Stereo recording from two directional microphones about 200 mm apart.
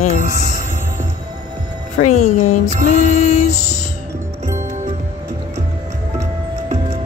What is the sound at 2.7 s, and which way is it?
Speech, 40° right (ahead or behind).